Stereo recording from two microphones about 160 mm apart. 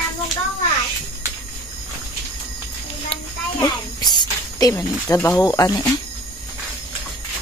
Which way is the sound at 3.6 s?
25° left (ahead or behind).